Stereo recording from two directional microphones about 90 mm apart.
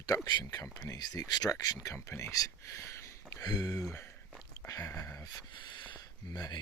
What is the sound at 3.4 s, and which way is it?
Speech, 45° left (ahead or behind).